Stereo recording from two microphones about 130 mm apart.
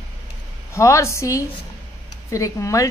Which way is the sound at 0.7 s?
20° left (ahead or behind).